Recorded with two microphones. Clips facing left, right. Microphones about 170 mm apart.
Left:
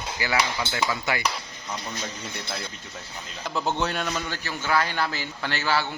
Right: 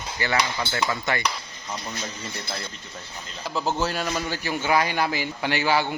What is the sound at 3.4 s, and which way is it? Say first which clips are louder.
A man's voice: right 1 dB; centre (ahead or behind).